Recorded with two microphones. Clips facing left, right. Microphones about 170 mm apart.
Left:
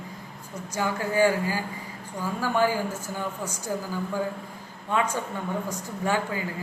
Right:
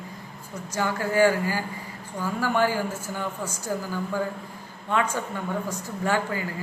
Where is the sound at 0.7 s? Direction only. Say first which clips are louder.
Right 1 dB; 15° left (ahead or behind).